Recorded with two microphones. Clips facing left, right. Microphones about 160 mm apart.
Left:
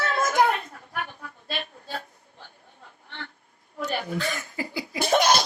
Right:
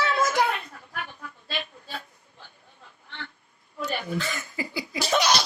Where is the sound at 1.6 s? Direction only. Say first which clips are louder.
Left 3 dB; 45° left (ahead or behind).